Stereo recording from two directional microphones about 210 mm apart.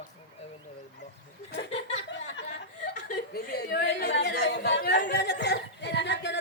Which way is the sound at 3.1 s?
50° left (ahead or behind).